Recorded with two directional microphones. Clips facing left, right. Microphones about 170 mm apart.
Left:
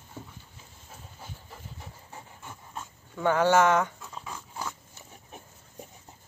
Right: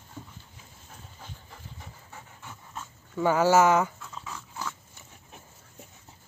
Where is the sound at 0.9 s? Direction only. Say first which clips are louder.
Left 1 dB; 5° left (ahead or behind).